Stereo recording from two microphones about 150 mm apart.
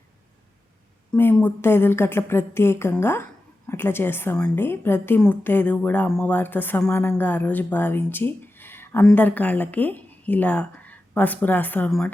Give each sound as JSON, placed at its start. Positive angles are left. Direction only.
{"t": 1.1, "sound": "a woman's voice", "side_deg": 15}
{"t": 8.4, "sound": "a sound", "side_deg": 15}
{"t": 9.0, "sound": "a woman's voice", "side_deg": 10}